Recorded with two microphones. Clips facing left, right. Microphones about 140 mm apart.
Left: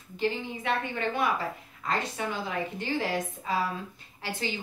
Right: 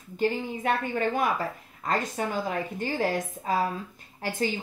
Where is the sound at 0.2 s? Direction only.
45° right (ahead or behind).